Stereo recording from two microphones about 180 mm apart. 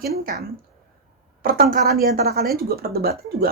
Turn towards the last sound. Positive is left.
turn(degrees=-60)  # may be behind; listen again after turning